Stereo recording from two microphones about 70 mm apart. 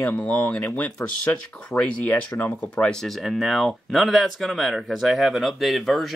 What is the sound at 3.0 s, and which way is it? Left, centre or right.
Speech, centre.